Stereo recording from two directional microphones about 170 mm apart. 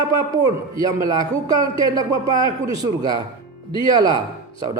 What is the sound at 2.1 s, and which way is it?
Speech, 30° left (ahead or behind).